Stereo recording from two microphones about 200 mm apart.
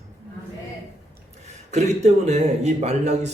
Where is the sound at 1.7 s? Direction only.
35° right (ahead or behind).